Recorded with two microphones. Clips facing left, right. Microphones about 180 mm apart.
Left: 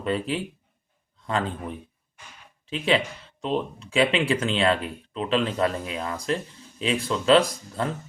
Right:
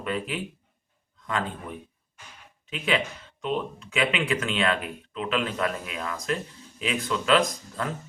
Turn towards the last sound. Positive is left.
turn(degrees=30)  # may be behind; listen again after turning